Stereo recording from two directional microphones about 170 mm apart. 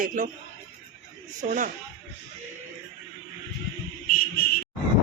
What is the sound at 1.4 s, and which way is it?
Speech, 40° right (ahead or behind).